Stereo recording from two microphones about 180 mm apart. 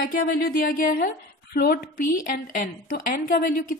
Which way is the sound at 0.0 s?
50° left (ahead or behind).